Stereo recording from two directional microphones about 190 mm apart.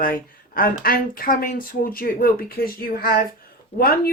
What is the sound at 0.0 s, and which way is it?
Speech, 50° left (ahead or behind).